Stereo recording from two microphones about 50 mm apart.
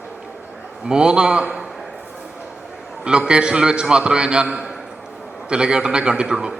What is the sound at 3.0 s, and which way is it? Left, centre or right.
A man's voice, centre.